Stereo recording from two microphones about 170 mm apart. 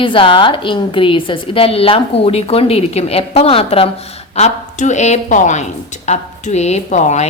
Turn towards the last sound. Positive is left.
turn(degrees=40)  # may be behind; listen again after turning